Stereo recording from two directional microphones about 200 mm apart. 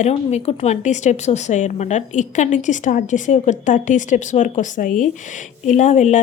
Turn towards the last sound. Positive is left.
turn(degrees=35)  # may be behind; listen again after turning